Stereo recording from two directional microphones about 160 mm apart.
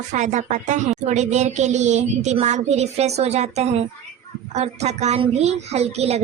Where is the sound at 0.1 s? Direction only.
50° right (ahead or behind).